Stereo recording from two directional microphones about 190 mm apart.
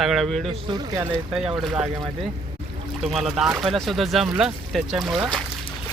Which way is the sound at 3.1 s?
Centre (ahead or behind).